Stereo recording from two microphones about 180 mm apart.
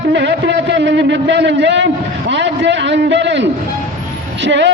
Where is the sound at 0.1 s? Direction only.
75° right (ahead or behind).